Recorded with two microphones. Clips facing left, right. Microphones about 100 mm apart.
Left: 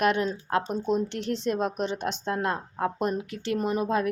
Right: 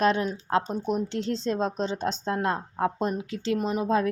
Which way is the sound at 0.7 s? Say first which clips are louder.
Left 1 dB; 20° right (ahead or behind).